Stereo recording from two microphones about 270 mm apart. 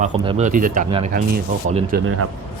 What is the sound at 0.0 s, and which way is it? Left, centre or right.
Speech, right.